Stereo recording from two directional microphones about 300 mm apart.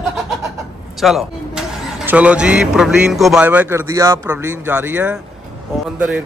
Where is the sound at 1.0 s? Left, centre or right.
Centre.